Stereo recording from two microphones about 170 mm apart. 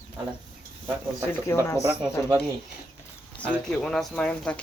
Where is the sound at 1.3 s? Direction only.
15° left (ahead or behind).